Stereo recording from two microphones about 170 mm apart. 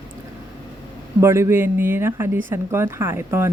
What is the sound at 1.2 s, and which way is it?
Speech, 15° right (ahead or behind).